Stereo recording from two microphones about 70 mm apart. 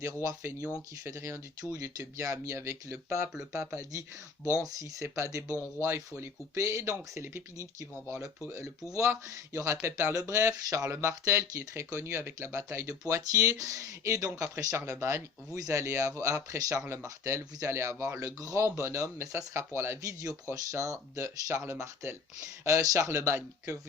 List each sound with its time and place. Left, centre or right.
0.0 s speech: right
1.7 s speech: right
4.6 s speech: right
7.6 s speech: right